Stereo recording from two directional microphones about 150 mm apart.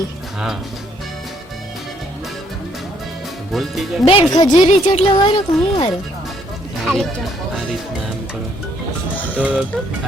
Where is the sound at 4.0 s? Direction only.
35° left (ahead or behind).